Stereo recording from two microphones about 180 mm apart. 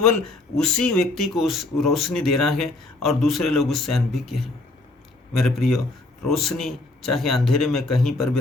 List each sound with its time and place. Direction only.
0.5 s speech: 5° left (ahead or behind)